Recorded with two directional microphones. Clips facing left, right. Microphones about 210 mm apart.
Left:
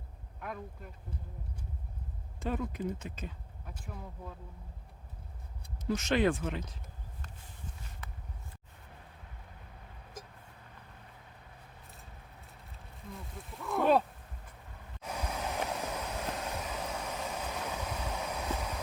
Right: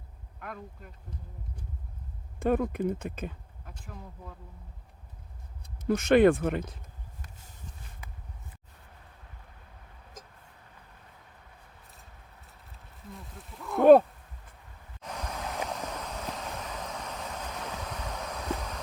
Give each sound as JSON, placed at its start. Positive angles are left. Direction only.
{"t": 0.3, "sound": "a sound", "side_deg": 0}
{"t": 2.4, "sound": "speech", "side_deg": -55}
{"t": 5.8, "sound": "speech", "side_deg": -55}
{"t": 8.0, "sound": "a sound", "side_deg": -10}
{"t": 13.1, "sound": "speech", "side_deg": 0}
{"t": 15.0, "sound": "vehicle", "side_deg": 10}